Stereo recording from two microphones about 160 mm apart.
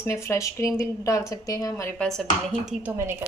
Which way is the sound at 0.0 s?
15° left (ahead or behind).